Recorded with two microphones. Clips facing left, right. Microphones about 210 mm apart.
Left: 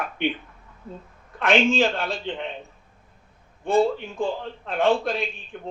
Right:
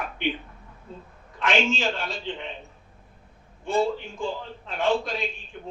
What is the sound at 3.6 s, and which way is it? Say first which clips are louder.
A man's voice: left 4 dB; 55° left (ahead or behind).